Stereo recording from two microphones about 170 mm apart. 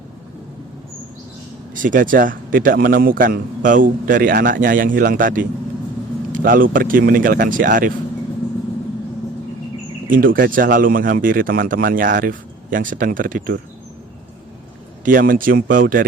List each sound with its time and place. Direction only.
1.7 s a man's voice: 50° right (ahead or behind)
10.1 s a man's voice: 55° right (ahead or behind)
15.0 s a man's voice: 55° right (ahead or behind)